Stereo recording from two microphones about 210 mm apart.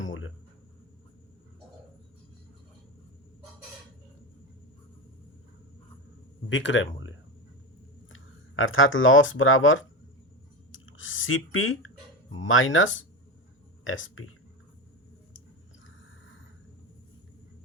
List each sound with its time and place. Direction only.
0.0 s a sound: 70° left (ahead or behind)
6.5 s speech: 60° left (ahead or behind)
8.1 s speech: 70° left (ahead or behind)